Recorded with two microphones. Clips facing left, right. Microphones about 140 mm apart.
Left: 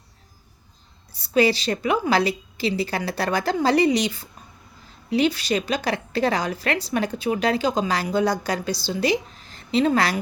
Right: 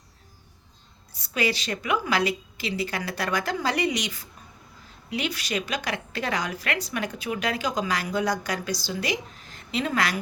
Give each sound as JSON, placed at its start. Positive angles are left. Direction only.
{"t": 1.1, "sound": "a woman's voice", "side_deg": 30}